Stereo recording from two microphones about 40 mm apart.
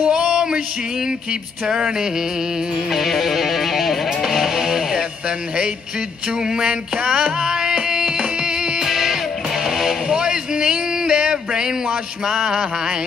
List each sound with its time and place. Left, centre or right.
0.1 s male singing: centre
1.7 s a sound: centre
2.9 s music: centre
6.6 s music: right
8.8 s music: centre
9.7 s a sound: centre